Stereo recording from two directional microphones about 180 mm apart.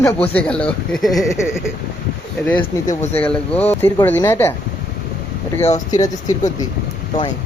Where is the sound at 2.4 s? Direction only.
5° left (ahead or behind).